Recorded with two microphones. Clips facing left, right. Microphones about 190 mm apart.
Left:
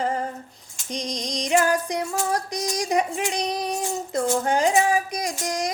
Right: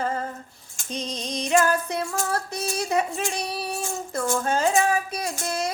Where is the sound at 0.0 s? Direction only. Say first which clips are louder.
Left 2 dB; 15° left (ahead or behind).